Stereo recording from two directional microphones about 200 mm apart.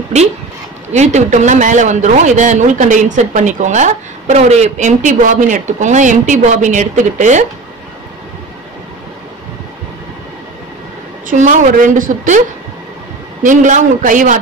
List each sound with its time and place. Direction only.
0.9 s a woman's voice: 35° right (ahead or behind)
11.2 s a woman's voice: 40° right (ahead or behind)